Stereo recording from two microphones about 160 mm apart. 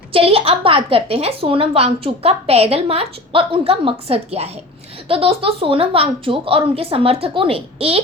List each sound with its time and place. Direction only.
0.1 s a woman's voice: 35° right (ahead or behind)